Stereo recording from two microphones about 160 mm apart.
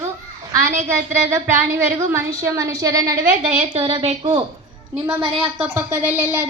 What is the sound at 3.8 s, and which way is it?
Speech, 35° right (ahead or behind).